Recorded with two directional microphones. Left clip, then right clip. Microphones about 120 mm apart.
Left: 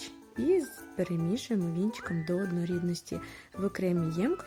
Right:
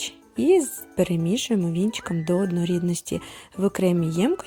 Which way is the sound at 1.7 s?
15° left (ahead or behind).